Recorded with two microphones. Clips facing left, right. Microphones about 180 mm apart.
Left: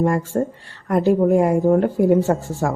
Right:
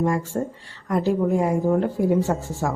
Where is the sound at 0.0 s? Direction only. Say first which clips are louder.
Left 4 dB; 55° left (ahead or behind).